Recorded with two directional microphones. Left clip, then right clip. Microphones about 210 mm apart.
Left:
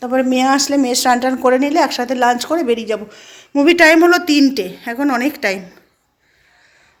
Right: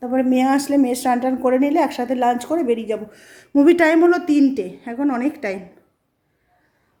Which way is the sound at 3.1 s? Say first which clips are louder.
Left 1 dB; 25° right (ahead or behind).